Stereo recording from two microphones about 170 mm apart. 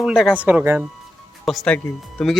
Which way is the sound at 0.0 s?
Centre (ahead or behind).